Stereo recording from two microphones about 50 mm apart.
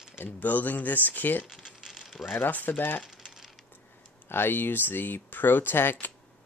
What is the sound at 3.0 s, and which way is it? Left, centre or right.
Coin, centre.